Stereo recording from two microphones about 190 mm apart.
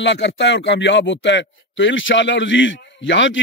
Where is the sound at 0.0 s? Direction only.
70° left (ahead or behind).